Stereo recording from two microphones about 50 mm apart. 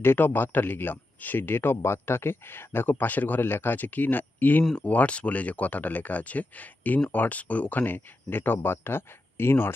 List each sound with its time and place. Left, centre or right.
0.0 s speech: left